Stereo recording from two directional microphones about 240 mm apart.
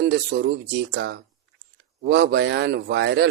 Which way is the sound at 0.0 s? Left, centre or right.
Right.